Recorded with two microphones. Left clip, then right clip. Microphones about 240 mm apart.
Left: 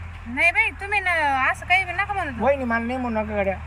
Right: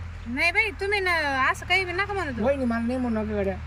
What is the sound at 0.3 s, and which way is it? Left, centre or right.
Speech, centre.